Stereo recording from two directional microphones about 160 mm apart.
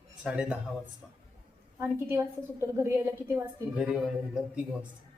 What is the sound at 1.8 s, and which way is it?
A woman's voice, 15° right (ahead or behind).